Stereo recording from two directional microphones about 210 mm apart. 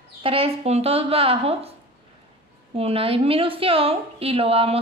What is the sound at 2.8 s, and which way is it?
A woman's voice, 25° right (ahead or behind).